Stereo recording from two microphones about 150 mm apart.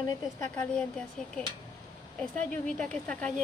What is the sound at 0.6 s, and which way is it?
Speech, 5° left (ahead or behind).